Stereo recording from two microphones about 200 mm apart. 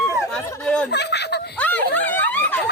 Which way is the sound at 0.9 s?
55° left (ahead or behind).